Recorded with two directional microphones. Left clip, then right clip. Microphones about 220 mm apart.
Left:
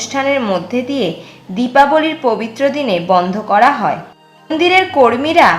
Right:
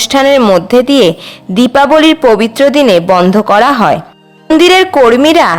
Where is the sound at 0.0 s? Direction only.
50° right (ahead or behind).